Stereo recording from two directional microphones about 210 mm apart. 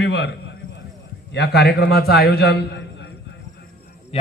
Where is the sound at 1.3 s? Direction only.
50° left (ahead or behind).